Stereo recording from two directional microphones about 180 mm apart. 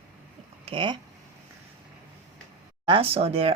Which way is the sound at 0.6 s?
30° right (ahead or behind).